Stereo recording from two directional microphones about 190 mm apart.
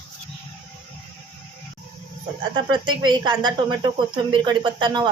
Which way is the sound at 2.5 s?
25° right (ahead or behind).